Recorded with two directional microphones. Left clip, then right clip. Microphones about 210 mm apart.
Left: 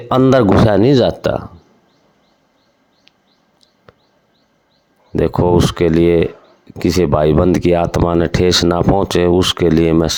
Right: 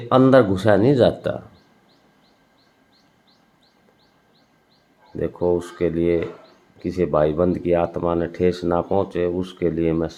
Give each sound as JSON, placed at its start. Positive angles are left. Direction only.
{"t": 0.1, "sound": "speech", "side_deg": 45}
{"t": 5.1, "sound": "speech", "side_deg": 45}